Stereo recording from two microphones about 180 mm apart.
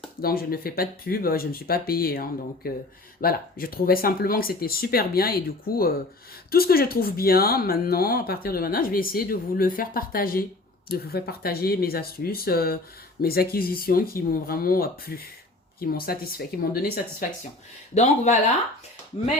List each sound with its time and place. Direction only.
0.2 s speech: 55° left (ahead or behind)
17.9 s speech: 40° left (ahead or behind)